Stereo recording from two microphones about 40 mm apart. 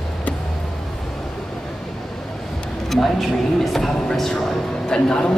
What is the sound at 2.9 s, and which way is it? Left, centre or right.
Speech, centre.